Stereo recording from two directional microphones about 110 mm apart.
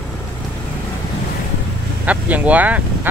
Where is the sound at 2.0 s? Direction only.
15° right (ahead or behind).